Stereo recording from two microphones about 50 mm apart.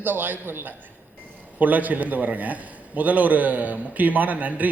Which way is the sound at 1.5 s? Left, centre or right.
Right.